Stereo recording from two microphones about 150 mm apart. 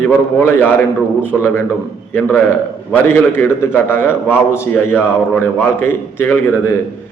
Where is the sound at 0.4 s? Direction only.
15° left (ahead or behind).